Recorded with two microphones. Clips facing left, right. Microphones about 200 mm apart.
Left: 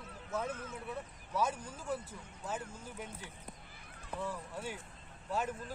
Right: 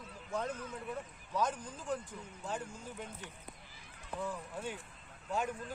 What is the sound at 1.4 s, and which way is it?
A man's voice, 10° left (ahead or behind).